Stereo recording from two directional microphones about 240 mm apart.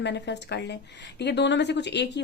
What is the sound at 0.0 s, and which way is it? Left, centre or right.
A woman's voice, left.